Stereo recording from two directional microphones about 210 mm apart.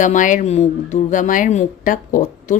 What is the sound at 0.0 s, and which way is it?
Speech, 40° left (ahead or behind).